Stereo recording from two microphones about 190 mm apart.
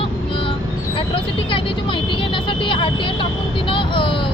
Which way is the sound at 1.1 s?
25° left (ahead or behind).